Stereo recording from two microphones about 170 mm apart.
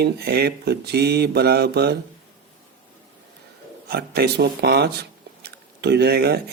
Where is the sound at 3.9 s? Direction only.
70° right (ahead or behind).